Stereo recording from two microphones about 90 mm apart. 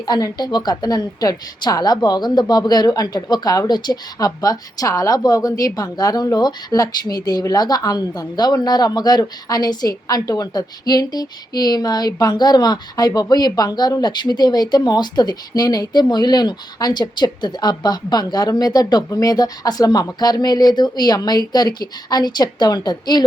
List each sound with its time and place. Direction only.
0.0 s a woman's voice: 50° left (ahead or behind)